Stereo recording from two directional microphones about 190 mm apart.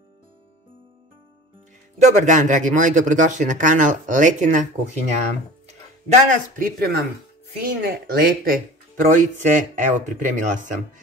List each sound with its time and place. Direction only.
2.0 s speech: 40° right (ahead or behind); by 8.5 s 55° right (ahead or behind)
9.1 s speech: 40° right (ahead or behind)